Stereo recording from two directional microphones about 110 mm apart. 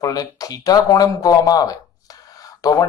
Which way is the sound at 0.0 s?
35° left (ahead or behind).